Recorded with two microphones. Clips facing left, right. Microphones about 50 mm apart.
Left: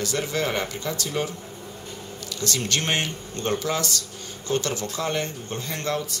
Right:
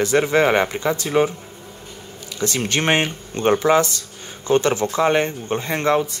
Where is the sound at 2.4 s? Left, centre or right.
Right.